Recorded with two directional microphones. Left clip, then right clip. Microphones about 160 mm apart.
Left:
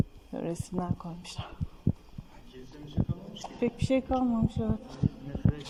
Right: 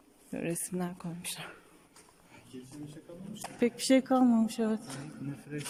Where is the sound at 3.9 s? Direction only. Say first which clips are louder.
Right 3 dB; 35° right (ahead or behind).